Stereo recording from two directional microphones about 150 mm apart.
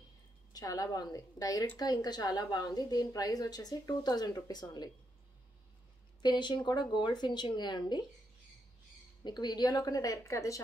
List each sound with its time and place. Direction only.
0.5 s a woman's voice: 25° left (ahead or behind)
6.2 s a woman's voice: 30° left (ahead or behind)
9.2 s a woman's voice: 30° left (ahead or behind)